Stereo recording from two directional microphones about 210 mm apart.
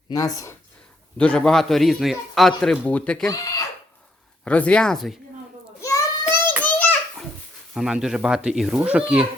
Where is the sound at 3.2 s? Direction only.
15° left (ahead or behind).